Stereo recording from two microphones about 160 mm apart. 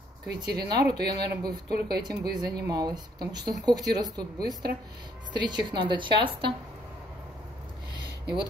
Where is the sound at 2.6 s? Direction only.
25° right (ahead or behind).